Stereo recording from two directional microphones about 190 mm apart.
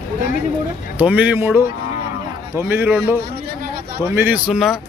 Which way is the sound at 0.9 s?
10° right (ahead or behind).